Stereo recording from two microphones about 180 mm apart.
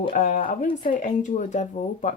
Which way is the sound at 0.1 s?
50° left (ahead or behind).